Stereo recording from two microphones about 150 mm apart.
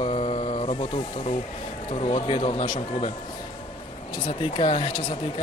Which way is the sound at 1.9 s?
40° left (ahead or behind).